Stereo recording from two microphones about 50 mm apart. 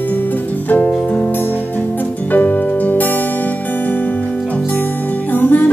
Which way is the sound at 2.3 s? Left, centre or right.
Left.